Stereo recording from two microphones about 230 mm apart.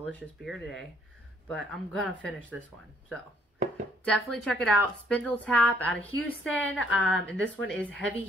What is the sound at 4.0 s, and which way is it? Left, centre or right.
A woman's voice, centre.